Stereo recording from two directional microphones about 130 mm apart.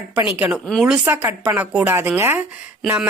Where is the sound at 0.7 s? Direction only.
Centre (ahead or behind).